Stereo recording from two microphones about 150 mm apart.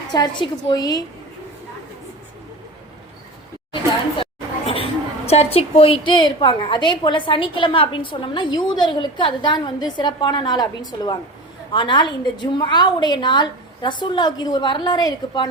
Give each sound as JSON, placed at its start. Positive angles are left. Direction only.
{"t": 0.1, "sound": "a woman's voice", "side_deg": 30}
{"t": 4.2, "sound": "a woman's voice", "side_deg": 40}